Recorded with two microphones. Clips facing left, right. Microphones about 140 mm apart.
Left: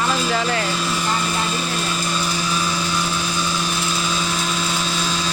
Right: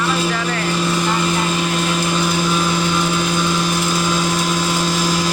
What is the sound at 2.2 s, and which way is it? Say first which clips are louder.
Vehicle: right 5 dB; 55° right (ahead or behind).